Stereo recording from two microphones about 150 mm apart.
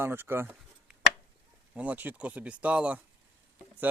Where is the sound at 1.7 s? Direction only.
10° right (ahead or behind).